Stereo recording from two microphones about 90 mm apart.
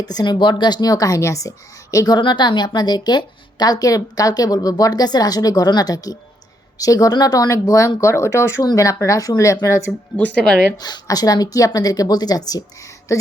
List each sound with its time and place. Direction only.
0.0 s a woman's voice: 50° left (ahead or behind)
2.1 s a woman's voice: 60° left (ahead or behind); by 9.9 s 35° left (ahead or behind)
10.2 s speech: 15° left (ahead or behind)
10.8 s a woman's voice: 50° left (ahead or behind)